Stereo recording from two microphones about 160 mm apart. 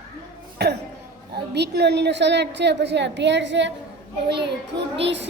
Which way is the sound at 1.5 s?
90° right.